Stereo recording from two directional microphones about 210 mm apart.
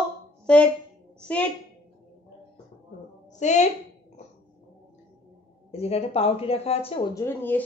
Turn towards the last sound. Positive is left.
turn(degrees=10)  # may be behind; listen again after turning